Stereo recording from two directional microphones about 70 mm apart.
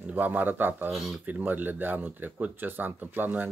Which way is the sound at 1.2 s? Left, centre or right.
Right.